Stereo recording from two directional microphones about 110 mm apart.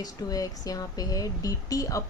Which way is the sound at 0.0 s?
35° left (ahead or behind).